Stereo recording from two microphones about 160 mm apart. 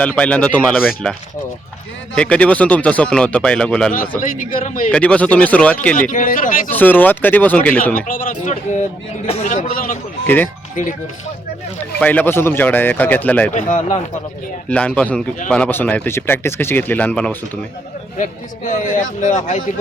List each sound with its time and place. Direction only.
0.0 s speech: 5° left (ahead or behind)
2.1 s speech: 5° left (ahead or behind)
4.2 s speech: 55° left (ahead or behind)
4.9 s speech: 5° left (ahead or behind)
6.0 s speech: 55° left (ahead or behind)
6.7 s speech: 10° left (ahead or behind)
7.9 s a man's voice: 55° left (ahead or behind)
10.2 s speech: 10° left (ahead or behind)
10.8 s speech: 55° left (ahead or behind)
11.8 s speech: 10° left (ahead or behind)
13.5 s a man's voice: 55° left (ahead or behind)
14.7 s speech: 5° left (ahead or behind)
18.2 s a man's voice: 50° left (ahead or behind)